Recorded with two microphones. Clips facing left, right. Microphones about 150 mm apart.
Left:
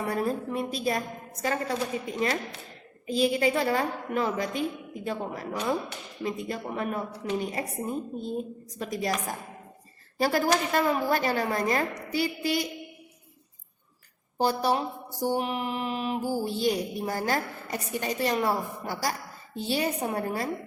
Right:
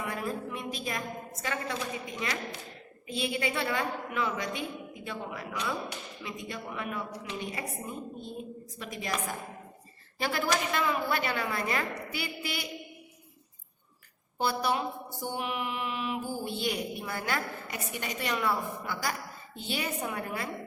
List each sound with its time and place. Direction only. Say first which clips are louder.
0.0 s a woman's voice: left 6 dB; 40° left (ahead or behind)
3.1 s mantra: left 8 dB; 40° left (ahead or behind)
14.3 s mantra: left 4 dB; 35° left (ahead or behind)